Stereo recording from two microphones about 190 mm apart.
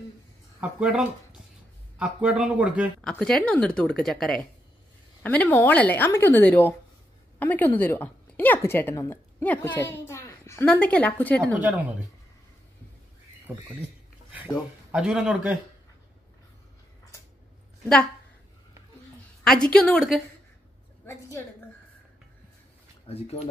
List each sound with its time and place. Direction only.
0.6 s speech: 5° right (ahead or behind)
3.0 s a woman's voice: 5° left (ahead or behind)
11.6 s speech: 10° right (ahead or behind)
14.9 s speech: 5° right (ahead or behind)
19.4 s speech: 5° left (ahead or behind)
21.0 s a woman's voice: 10° left (ahead or behind)
23.0 s speech: 30° left (ahead or behind)